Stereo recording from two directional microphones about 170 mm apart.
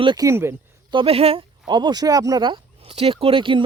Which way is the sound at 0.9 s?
35° right (ahead or behind).